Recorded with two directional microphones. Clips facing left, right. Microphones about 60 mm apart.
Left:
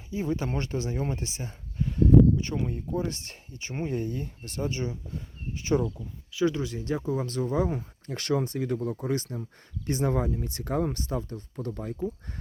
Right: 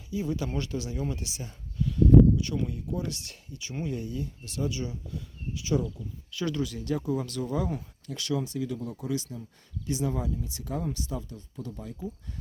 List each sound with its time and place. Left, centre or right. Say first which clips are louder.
0.1 s speech: left 1 dB; left
6.3 s speech: left 4 dB; left